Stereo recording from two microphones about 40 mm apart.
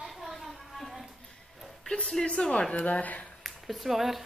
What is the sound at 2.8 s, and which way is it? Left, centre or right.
Speech, left.